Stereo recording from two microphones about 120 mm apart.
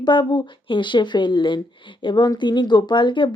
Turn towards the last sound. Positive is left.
turn(degrees=40)  # may be behind; listen again after turning